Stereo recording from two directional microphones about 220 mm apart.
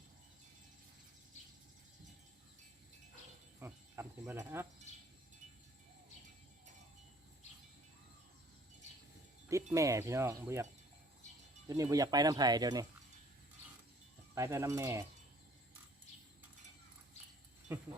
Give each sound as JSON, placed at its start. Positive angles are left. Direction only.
{"t": 3.6, "sound": "cricket", "side_deg": -10}
{"t": 9.7, "sound": "speech", "side_deg": -15}
{"t": 11.7, "sound": "speech", "side_deg": -15}
{"t": 14.3, "sound": "speech", "side_deg": -15}
{"t": 17.7, "sound": "speech", "side_deg": -10}